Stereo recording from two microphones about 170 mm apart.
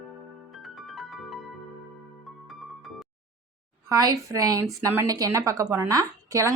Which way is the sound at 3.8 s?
20° right (ahead or behind).